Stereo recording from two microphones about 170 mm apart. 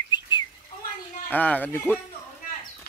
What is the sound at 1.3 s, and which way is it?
Speech, 10° left (ahead or behind).